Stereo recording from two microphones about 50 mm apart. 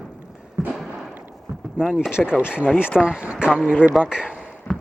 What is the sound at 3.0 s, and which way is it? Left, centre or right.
Speech, right.